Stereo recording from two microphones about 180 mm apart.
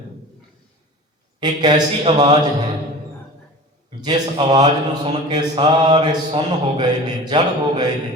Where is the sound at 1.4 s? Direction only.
20° right (ahead or behind).